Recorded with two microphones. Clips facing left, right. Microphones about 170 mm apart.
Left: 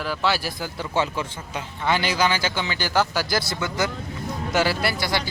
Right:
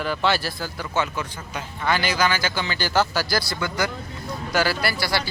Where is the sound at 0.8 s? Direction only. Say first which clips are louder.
Left 2 dB; 30° left (ahead or behind).